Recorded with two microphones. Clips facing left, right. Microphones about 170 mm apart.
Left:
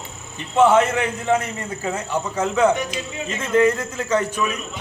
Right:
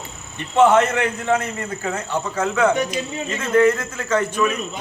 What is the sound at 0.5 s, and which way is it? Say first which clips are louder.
Speech: right 1 dB; 10° left (ahead or behind).